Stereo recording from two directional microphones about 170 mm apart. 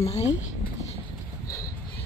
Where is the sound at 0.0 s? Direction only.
40° left (ahead or behind).